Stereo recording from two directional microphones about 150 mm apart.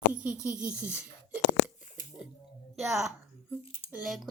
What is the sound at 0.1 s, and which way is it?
Speech, 10° right (ahead or behind).